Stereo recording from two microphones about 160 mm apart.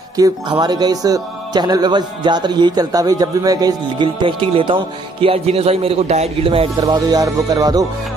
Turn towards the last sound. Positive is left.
turn(degrees=-25)  # may be behind; listen again after turning